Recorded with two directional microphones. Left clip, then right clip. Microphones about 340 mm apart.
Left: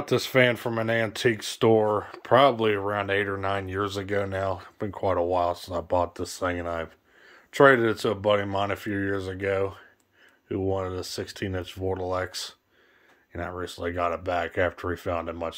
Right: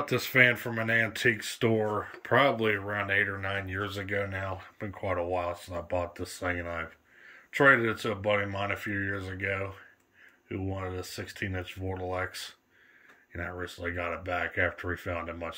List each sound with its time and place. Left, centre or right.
0.0 s speech: centre
10.8 s speech: centre